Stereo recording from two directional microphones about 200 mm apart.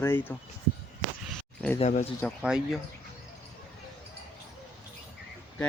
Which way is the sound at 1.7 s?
35° left (ahead or behind).